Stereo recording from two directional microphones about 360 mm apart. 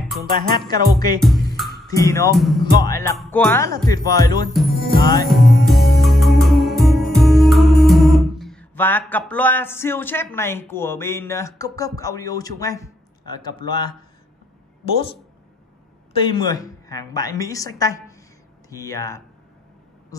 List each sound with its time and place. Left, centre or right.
0.2 s music: right
0.9 s a woman's voice: centre
4.6 s music: centre
5.0 s a woman's voice: centre
5.3 s music: centre
16.1 s a woman's voice: centre